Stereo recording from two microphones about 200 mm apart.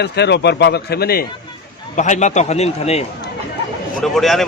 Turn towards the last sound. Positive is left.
turn(degrees=0)  # may be behind; listen again after turning